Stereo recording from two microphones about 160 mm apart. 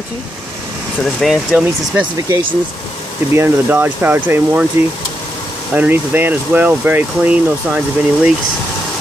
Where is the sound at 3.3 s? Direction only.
15° right (ahead or behind).